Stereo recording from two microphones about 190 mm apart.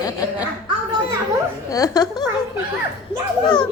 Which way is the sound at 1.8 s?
20° left (ahead or behind).